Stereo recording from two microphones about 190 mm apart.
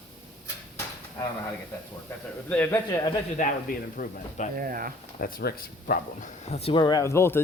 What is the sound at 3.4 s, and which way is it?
Speech, 45° left (ahead or behind).